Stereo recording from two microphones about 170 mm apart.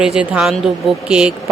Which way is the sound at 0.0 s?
5° right (ahead or behind).